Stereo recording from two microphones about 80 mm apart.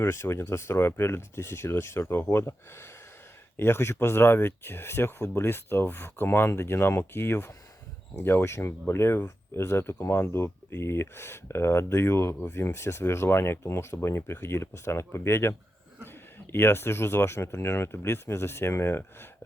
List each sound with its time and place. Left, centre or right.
0.0 s speech: left